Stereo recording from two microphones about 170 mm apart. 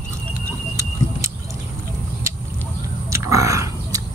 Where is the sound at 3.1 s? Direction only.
20° right (ahead or behind).